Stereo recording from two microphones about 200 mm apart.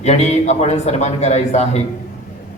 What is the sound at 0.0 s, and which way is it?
A man's voice, 35° left (ahead or behind).